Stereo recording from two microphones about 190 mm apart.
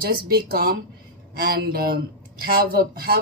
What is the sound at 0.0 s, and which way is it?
A woman's voice, 55° right (ahead or behind).